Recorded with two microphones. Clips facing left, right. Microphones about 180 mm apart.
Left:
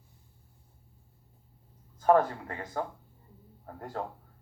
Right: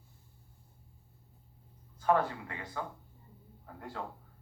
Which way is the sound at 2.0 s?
45° left (ahead or behind).